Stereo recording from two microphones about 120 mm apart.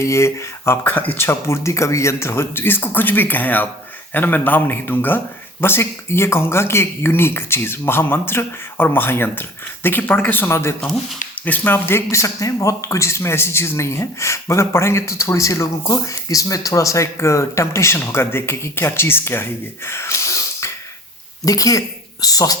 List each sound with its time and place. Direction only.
0.0 s speech: 25° left (ahead or behind)